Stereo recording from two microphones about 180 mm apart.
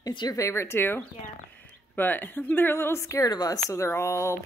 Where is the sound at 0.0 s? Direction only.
20° left (ahead or behind).